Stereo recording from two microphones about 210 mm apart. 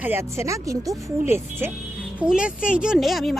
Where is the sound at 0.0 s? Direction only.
10° right (ahead or behind).